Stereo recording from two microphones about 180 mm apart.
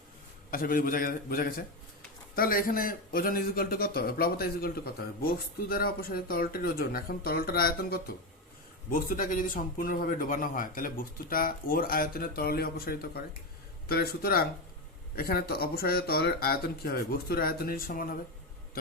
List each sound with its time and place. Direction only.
0.5 s a man's voice: 50° left (ahead or behind)